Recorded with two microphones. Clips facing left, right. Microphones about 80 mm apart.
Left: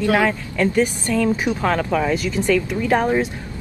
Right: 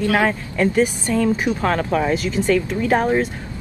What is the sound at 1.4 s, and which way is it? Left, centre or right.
Speech, centre.